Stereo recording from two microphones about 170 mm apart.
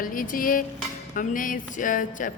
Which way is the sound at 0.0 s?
55° left (ahead or behind).